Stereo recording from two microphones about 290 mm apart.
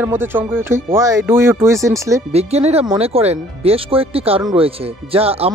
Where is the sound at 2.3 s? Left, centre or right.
Right.